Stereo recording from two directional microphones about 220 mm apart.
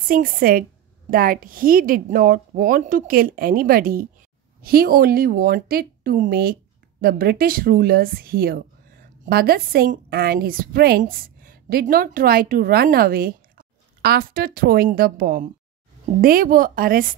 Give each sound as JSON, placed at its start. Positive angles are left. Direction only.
{"t": 0.1, "sound": "a woman's voice", "side_deg": -40}